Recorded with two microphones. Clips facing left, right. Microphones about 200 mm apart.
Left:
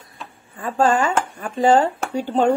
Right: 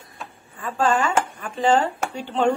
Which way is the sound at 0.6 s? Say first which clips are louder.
Left 3 dB; 45° left (ahead or behind).